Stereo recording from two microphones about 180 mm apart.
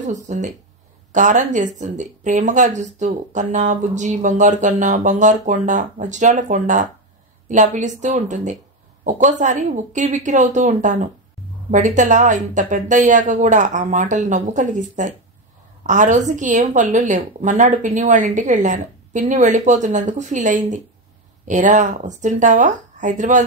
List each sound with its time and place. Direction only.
0.0 s speech: 45° right (ahead or behind)